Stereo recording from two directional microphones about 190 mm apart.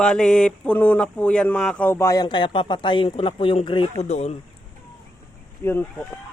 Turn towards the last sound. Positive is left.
turn(degrees=10)  # may be behind; listen again after turning